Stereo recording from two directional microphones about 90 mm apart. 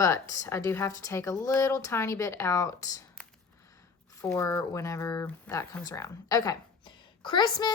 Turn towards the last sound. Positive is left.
turn(degrees=50)  # may be behind; listen again after turning